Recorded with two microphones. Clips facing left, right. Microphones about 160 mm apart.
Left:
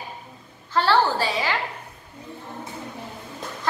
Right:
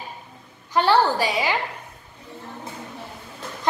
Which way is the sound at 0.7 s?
15° right (ahead or behind).